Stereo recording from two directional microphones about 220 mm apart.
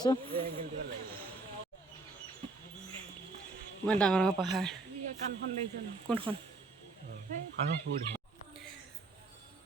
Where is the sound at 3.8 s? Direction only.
5° left (ahead or behind).